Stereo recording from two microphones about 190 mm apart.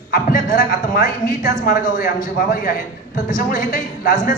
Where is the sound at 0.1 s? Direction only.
50° left (ahead or behind).